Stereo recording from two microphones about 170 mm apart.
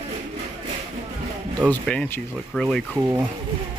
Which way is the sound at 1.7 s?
10° left (ahead or behind).